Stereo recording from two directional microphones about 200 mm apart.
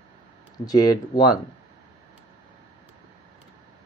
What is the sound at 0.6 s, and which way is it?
Speech, 20° left (ahead or behind).